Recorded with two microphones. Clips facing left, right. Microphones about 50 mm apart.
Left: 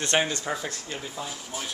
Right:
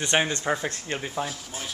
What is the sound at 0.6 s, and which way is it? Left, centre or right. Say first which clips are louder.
Speech: right 4 dB; right.